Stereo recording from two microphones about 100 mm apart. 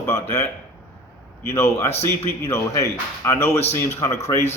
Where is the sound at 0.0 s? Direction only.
25° left (ahead or behind).